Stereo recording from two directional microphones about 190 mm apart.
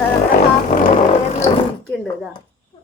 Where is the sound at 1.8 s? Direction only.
Centre (ahead or behind).